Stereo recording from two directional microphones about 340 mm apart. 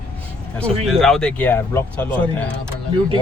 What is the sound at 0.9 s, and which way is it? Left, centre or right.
Speech, centre.